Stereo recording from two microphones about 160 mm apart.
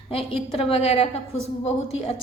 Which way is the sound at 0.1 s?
35° left (ahead or behind).